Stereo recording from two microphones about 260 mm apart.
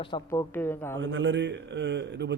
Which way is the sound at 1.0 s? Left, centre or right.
Right.